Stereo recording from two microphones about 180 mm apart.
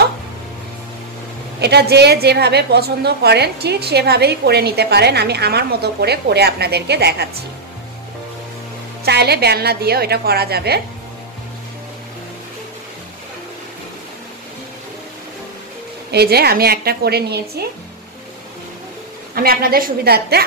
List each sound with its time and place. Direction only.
1.6 s a woman's voice: 65° right (ahead or behind)
9.0 s a woman's voice: 65° right (ahead or behind)
16.1 s a woman's voice: 65° right (ahead or behind)
19.3 s a woman's voice: 55° right (ahead or behind)